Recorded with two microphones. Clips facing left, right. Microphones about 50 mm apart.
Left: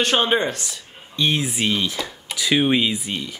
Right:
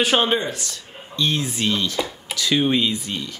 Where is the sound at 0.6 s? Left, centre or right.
Centre.